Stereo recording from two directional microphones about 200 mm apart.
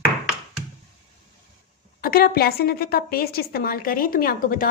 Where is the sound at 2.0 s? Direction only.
50° left (ahead or behind).